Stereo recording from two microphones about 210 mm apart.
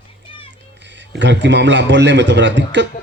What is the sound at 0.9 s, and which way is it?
A man's voice, 60° right (ahead or behind).